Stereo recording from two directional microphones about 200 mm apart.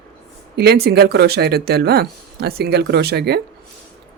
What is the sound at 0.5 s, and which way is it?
Speech, 50° right (ahead or behind).